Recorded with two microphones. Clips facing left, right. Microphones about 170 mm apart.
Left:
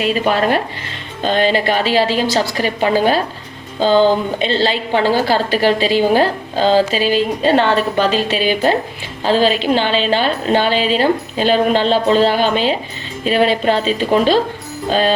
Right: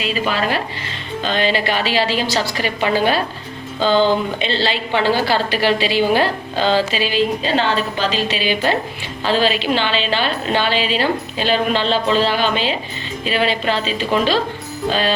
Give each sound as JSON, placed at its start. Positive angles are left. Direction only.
{"t": 0.0, "sound": "a woman's voice", "side_deg": 50}